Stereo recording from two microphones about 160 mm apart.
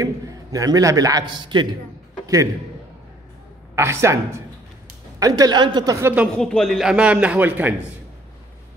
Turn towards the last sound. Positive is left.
turn(degrees=-10)  # may be behind; listen again after turning